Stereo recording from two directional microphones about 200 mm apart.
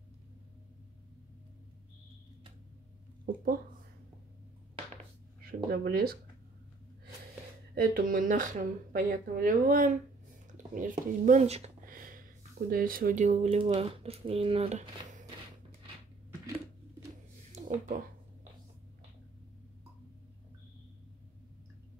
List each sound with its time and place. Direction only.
3.3 s speech: 45° right (ahead or behind)
5.4 s speech: 50° right (ahead or behind)
7.7 s speech: 45° right (ahead or behind); by 11.7 s 30° right (ahead or behind)
11.8 s speech: 45° right (ahead or behind)
17.5 s a sound: 35° right (ahead or behind)